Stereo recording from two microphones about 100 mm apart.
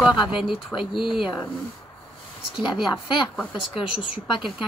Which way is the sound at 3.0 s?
50° left (ahead or behind).